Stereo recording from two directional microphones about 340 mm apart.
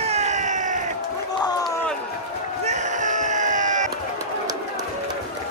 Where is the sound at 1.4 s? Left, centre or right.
Centre.